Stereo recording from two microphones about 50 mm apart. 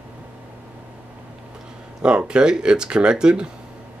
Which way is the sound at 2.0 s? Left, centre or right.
Centre.